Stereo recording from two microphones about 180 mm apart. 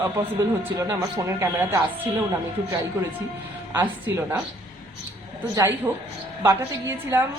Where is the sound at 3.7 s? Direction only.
10° right (ahead or behind).